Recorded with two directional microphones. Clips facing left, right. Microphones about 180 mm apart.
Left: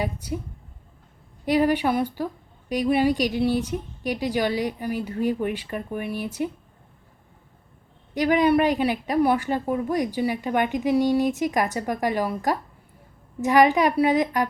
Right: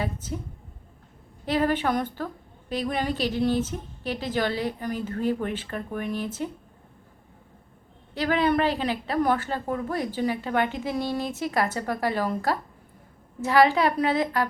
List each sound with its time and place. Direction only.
0.0 s a woman's voice: 15° left (ahead or behind)
1.5 s a woman's voice: 15° left (ahead or behind)
8.1 s a woman's voice: 15° left (ahead or behind)